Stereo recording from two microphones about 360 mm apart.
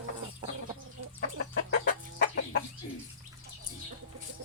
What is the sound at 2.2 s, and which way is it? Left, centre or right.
Chicken, left.